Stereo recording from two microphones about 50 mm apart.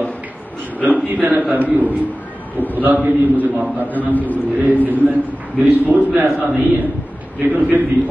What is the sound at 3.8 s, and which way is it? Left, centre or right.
Speech, left.